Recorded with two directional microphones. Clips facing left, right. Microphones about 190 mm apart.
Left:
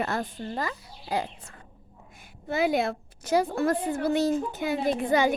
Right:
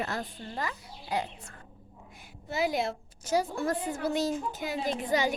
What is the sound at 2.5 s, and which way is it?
A woman's voice, 60° left (ahead or behind).